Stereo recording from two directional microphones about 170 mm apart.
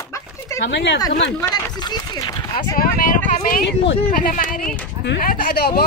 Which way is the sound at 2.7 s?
55° left (ahead or behind).